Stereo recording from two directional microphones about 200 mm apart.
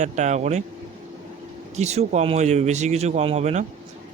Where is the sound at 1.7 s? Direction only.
35° right (ahead or behind).